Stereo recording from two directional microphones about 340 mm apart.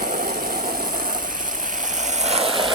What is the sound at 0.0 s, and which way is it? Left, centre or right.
Vehicle, right.